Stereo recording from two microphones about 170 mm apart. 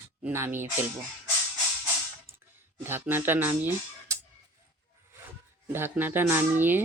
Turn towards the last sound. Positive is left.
turn(degrees=-10)  # may be behind; listen again after turning